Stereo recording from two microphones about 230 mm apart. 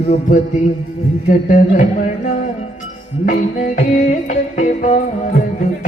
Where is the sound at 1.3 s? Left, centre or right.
Left.